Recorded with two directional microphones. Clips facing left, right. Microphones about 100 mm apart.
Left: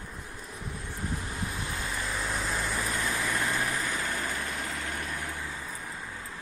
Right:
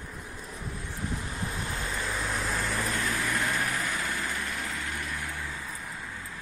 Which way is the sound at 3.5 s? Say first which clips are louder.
Even; 30° left (ahead or behind).